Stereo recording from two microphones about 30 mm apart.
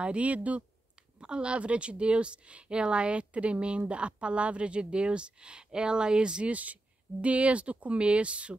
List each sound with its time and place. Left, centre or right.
0.0 s speech: right
1.2 s a woman's voice: right
6.5 s speech: right